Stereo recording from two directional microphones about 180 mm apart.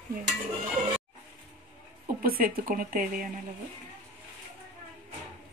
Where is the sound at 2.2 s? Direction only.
55° right (ahead or behind).